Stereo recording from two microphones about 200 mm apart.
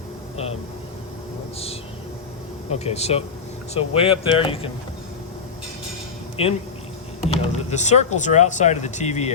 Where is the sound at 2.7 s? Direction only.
30° left (ahead or behind).